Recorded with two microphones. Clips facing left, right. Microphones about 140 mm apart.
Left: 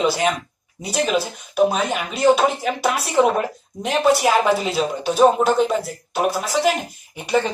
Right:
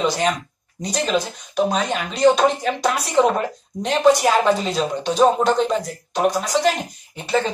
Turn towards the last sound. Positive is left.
turn(degrees=15)  # may be behind; listen again after turning